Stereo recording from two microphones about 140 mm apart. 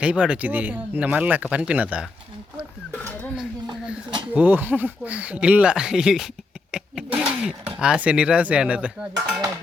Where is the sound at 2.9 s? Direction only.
10° left (ahead or behind).